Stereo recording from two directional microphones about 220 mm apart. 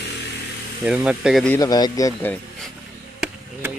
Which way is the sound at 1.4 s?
15° left (ahead or behind).